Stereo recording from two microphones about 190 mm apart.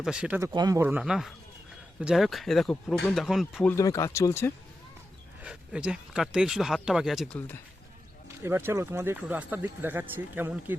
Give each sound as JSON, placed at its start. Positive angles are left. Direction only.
{"t": 0.0, "sound": "speech", "side_deg": -5}
{"t": 3.7, "sound": "speech", "side_deg": 15}
{"t": 5.4, "sound": "speech", "side_deg": -5}
{"t": 7.3, "sound": "speech", "side_deg": 10}
{"t": 8.4, "sound": "speech", "side_deg": -10}